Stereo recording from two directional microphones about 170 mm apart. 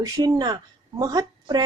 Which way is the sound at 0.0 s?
20° right (ahead or behind).